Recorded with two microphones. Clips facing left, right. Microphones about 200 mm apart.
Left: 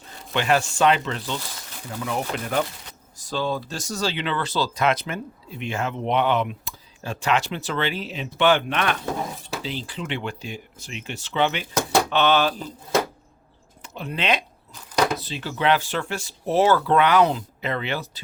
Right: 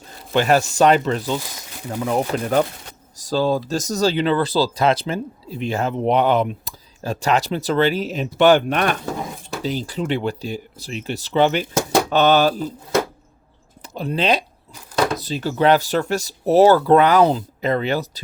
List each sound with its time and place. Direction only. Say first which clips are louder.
0.3 s speech: right 5 dB; 40° right (ahead or behind)
13.8 s speech: right 5 dB; 35° right (ahead or behind)
14.7 s chopping: right 2 dB; 5° right (ahead or behind)
15.2 s speech: right 7 dB; 40° right (ahead or behind)